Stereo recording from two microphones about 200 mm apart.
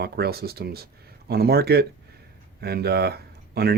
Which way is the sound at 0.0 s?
50° right (ahead or behind).